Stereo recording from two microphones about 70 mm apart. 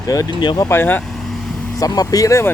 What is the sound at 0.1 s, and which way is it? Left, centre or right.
Speech, left.